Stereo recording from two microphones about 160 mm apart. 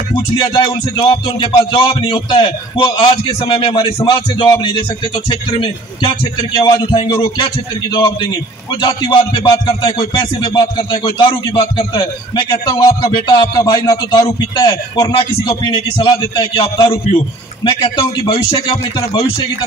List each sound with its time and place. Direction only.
0.1 s speech: 30° left (ahead or behind)